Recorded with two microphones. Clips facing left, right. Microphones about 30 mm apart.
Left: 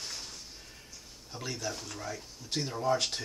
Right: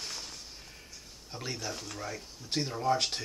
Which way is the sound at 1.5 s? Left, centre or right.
Right.